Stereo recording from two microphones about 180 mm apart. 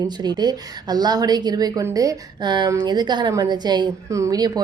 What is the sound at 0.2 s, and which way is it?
A woman's voice, 25° right (ahead or behind).